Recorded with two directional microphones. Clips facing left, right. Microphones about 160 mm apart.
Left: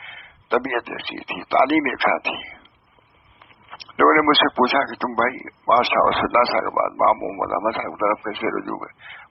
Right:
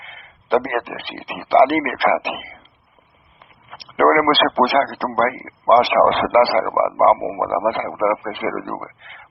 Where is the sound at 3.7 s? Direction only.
35° right (ahead or behind).